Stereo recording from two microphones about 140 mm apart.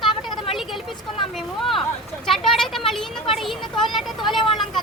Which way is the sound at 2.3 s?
Centre (ahead or behind).